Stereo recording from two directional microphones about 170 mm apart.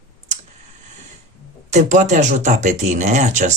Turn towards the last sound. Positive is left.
turn(degrees=-45)  # may be behind; listen again after turning